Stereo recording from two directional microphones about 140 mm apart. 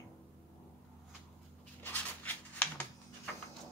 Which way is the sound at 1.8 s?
10° left (ahead or behind).